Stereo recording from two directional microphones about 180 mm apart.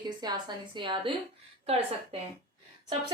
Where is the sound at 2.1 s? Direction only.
30° right (ahead or behind).